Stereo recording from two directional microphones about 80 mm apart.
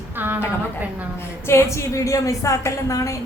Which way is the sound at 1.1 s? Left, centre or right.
Left.